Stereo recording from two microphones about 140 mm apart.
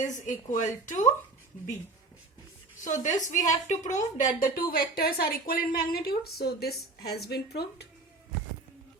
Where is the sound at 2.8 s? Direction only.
65° left (ahead or behind); by 6.3 s 90° left.